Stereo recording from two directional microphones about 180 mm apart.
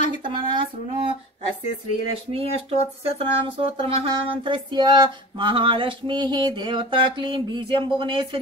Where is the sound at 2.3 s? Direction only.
35° right (ahead or behind).